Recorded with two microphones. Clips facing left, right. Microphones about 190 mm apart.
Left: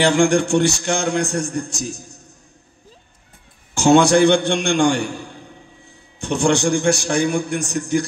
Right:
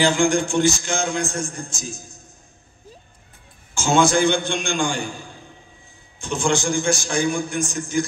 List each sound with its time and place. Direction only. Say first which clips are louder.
0.0 s a man's voice: left 3 dB; 70° left (ahead or behind)
3.7 s a man's voice: left 5 dB; 65° left (ahead or behind)